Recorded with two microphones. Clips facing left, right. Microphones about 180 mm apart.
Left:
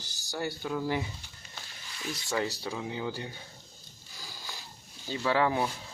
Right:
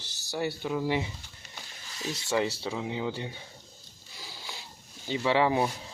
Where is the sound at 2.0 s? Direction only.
30° right (ahead or behind).